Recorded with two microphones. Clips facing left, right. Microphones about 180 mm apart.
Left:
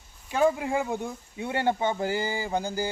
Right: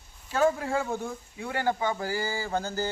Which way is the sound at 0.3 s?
15° left (ahead or behind).